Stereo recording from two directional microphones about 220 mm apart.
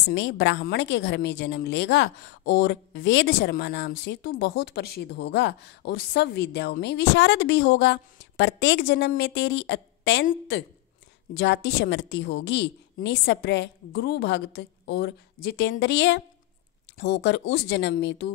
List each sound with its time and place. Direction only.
0.1 s a woman's voice: 55° left (ahead or behind)
11.3 s a woman's voice: 50° left (ahead or behind)